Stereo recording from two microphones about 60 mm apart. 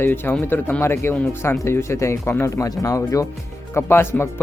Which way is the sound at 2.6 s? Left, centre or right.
Left.